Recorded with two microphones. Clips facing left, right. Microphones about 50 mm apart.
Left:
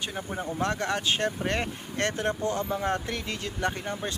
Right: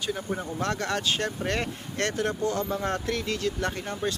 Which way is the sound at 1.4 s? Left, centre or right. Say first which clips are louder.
Even; centre.